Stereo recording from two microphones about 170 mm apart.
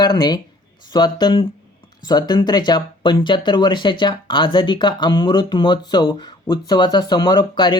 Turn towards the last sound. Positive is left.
turn(degrees=25)  # may be behind; listen again after turning